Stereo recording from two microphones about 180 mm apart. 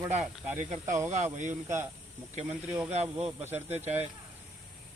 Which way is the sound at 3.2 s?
10° right (ahead or behind).